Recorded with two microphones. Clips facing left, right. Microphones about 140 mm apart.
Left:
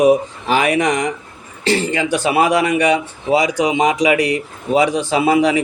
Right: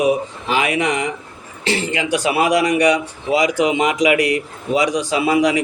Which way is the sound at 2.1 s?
25° left (ahead or behind).